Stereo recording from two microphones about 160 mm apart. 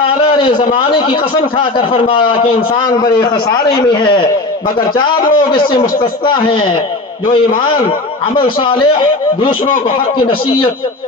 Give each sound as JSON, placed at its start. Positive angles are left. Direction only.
{"t": 0.2, "sound": "a man's voice", "side_deg": 30}
{"t": 3.6, "sound": "a man's voice", "side_deg": 30}